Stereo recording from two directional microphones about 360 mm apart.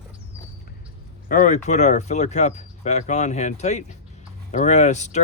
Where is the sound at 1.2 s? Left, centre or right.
Left.